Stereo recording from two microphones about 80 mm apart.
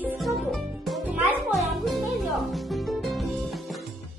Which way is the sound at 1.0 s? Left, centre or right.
Centre.